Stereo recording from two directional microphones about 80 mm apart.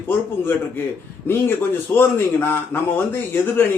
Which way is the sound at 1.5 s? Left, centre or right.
Left.